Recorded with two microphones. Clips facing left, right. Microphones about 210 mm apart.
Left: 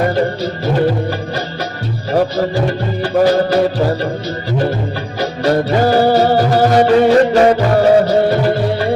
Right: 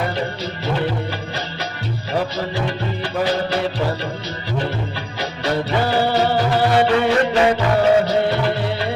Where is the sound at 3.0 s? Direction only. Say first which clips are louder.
Left 9 dB; 45° left (ahead or behind).